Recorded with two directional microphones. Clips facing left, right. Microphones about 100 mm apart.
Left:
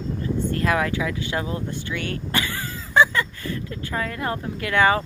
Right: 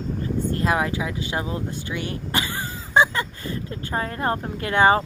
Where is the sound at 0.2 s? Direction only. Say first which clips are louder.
Even; 25° right (ahead or behind).